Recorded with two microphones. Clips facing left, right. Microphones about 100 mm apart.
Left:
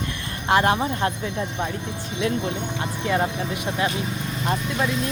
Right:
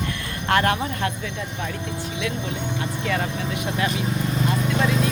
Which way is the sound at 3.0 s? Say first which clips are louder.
Left 4 dB; 25° left (ahead or behind).